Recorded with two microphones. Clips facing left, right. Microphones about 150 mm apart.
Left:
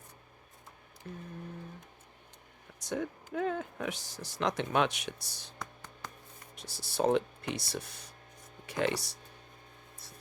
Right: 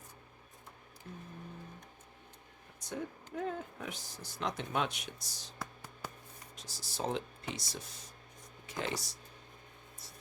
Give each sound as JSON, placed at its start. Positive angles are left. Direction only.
{"t": 3.3, "sound": "speech", "side_deg": 80}
{"t": 5.5, "sound": "music", "side_deg": -5}
{"t": 6.6, "sound": "speech", "side_deg": 65}